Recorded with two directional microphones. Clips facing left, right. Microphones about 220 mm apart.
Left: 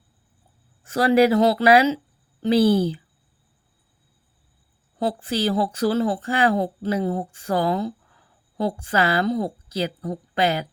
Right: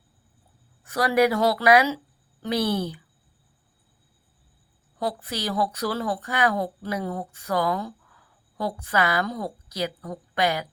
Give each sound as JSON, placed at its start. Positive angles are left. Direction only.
{"t": 0.9, "sound": "speech", "side_deg": 25}
{"t": 4.9, "sound": "speech", "side_deg": 30}